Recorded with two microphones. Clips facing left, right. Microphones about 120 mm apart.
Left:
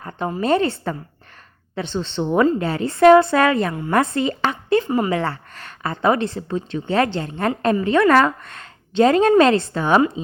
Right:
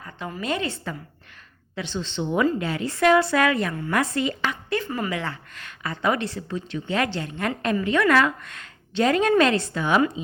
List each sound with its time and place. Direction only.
0.0 s a sound: 45° left (ahead or behind)
0.3 s a woman's voice: 35° left (ahead or behind)
2.0 s speech: 50° left (ahead or behind)
2.5 s a woman's voice: 35° left (ahead or behind)
4.8 s a woman's voice: 25° left (ahead or behind)
5.1 s a woman's voice: 40° left (ahead or behind)